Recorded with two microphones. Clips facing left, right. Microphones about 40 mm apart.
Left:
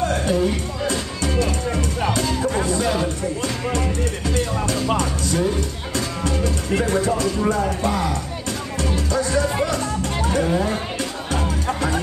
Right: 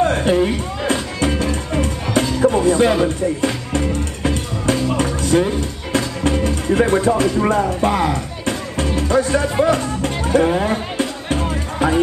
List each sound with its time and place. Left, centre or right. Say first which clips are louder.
0.0 s music: right 4 dB; right